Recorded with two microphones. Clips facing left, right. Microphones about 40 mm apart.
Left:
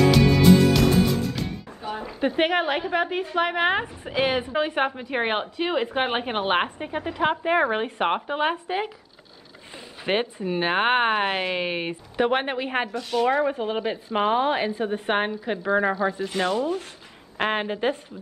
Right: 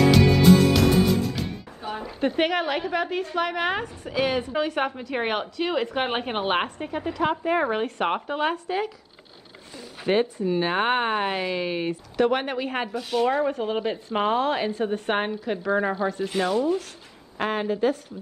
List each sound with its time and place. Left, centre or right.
0.1 s music: centre
2.1 s a woman's voice: centre
10.3 s speech: left
12.9 s speech: centre
13.4 s speech: centre
13.7 s a woman's voice: centre
17.4 s a woman's voice: left